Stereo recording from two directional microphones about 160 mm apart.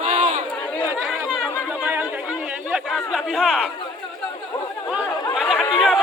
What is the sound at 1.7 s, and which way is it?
Chatter, 10° right (ahead or behind).